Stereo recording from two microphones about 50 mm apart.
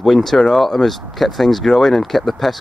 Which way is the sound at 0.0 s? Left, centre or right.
Centre.